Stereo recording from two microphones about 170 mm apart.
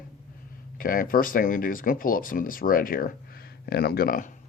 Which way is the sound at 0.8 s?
55° left (ahead or behind).